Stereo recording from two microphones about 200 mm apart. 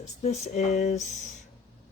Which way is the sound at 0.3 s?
35° left (ahead or behind).